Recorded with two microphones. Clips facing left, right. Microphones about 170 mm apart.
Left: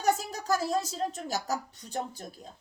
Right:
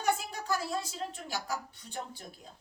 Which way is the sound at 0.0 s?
40° left (ahead or behind).